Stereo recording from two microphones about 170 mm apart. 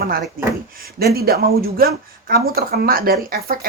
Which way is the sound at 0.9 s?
65° right (ahead or behind).